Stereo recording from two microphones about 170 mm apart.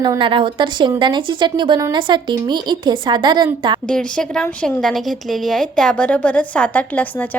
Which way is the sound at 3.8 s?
5° left (ahead or behind).